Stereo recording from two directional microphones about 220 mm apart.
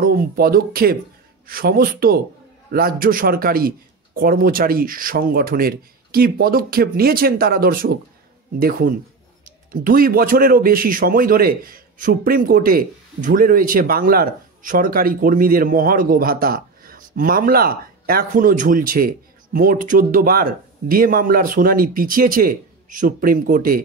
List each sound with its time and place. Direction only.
0.0 s a man's voice: 40° right (ahead or behind)